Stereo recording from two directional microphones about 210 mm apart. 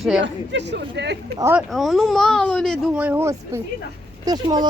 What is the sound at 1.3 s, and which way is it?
Speech, 10° right (ahead or behind).